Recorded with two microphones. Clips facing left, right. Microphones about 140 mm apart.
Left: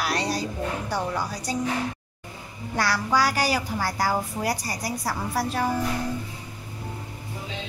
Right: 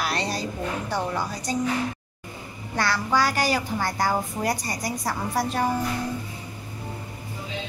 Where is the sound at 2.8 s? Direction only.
10° left (ahead or behind).